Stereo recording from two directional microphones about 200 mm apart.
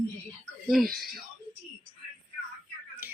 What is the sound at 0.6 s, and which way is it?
Speech, centre (ahead or behind).